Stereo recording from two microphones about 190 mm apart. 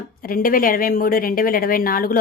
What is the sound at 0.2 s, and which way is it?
Speech, 50° left (ahead or behind).